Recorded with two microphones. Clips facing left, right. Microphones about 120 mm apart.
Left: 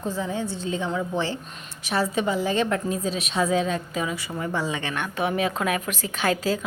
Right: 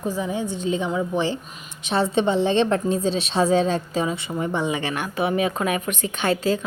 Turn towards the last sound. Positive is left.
turn(degrees=5)  # may be behind; listen again after turning